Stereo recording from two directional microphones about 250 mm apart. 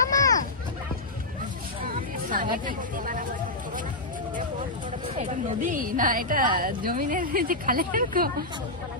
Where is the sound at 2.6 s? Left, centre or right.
Right.